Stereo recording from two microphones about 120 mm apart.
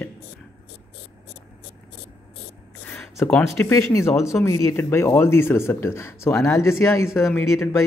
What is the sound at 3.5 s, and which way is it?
Speech, 20° left (ahead or behind).